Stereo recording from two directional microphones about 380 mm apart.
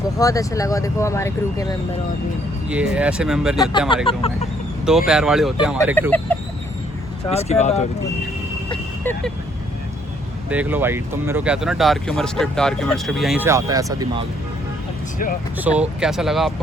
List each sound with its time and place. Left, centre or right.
0.2 s speech: centre
2.6 s speech: centre
3.7 s speech: centre
4.9 s speech: centre
7.3 s speech: centre
8.7 s vehicle: centre
10.5 s speech: centre
15.5 s speech: centre